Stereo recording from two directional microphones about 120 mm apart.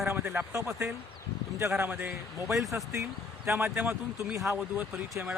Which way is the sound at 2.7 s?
25° right (ahead or behind).